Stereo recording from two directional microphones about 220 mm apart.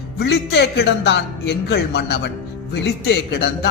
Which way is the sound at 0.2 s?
50° left (ahead or behind).